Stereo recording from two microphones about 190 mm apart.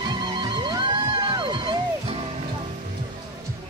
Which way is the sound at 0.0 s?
25° right (ahead or behind).